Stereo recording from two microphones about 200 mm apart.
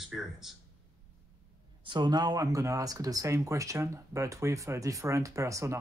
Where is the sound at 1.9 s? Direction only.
20° right (ahead or behind).